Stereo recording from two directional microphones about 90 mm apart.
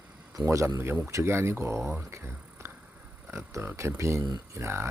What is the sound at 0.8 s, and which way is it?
Speech, 30° right (ahead or behind).